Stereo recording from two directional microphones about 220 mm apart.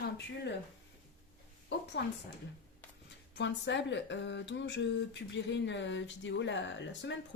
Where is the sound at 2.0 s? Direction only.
55° left (ahead or behind).